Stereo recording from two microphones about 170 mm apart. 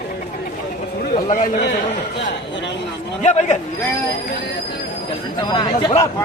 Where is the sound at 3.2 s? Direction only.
40° left (ahead or behind).